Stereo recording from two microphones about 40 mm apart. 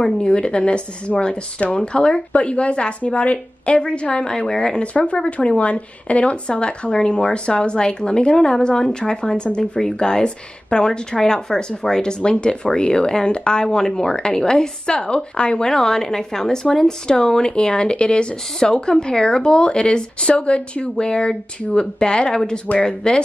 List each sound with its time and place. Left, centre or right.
0.3 s speech: left
4.9 s speech: left
15.7 s speech: centre